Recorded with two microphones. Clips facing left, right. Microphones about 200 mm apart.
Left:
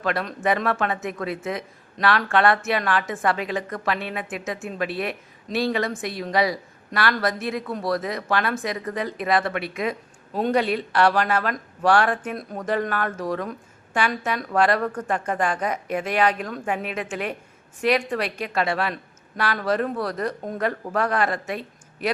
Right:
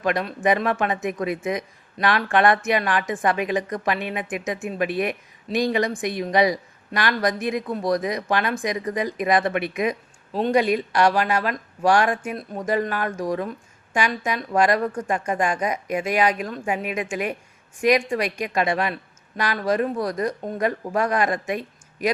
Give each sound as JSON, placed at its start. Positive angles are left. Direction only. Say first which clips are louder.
{"t": 0.0, "sound": "a woman's voice", "louder": "right 2 dB", "side_deg": -15}